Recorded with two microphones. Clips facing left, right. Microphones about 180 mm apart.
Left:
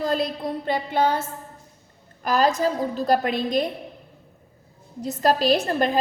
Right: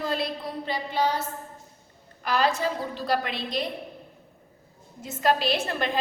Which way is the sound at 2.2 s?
40° left (ahead or behind).